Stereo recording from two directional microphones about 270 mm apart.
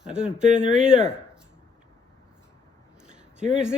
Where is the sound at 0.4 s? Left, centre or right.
Right.